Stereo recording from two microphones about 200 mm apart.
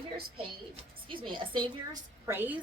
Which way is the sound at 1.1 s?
25° right (ahead or behind).